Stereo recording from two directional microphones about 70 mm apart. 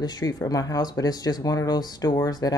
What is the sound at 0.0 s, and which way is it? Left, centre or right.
Speech, left.